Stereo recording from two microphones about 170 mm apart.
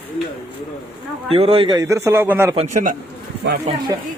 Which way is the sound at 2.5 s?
40° right (ahead or behind).